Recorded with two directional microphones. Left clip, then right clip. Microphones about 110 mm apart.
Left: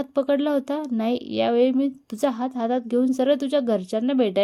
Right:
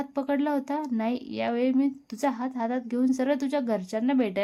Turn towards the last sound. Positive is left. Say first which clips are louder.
# left 5 dB
turn(degrees=40)  # may be behind; listen again after turning